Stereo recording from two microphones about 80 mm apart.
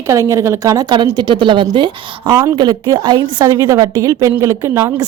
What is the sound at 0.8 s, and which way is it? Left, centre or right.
A woman's voice, right.